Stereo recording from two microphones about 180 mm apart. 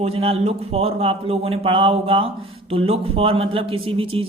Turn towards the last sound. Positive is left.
turn(degrees=-30)  # may be behind; listen again after turning